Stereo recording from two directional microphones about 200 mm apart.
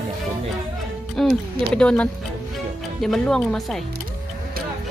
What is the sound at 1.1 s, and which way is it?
Speech, centre (ahead or behind).